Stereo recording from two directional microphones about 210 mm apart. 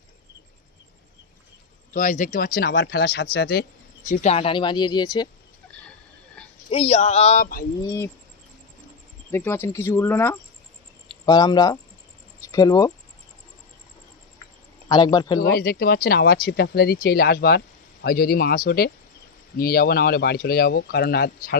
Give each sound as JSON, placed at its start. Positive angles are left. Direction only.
{"t": 1.9, "sound": "speech", "side_deg": 40}
{"t": 6.7, "sound": "speech", "side_deg": 30}
{"t": 7.9, "sound": "speech", "side_deg": 15}
{"t": 9.3, "sound": "speech", "side_deg": 10}
{"t": 14.8, "sound": "speech", "side_deg": 20}
{"t": 15.4, "sound": "speech", "side_deg": 45}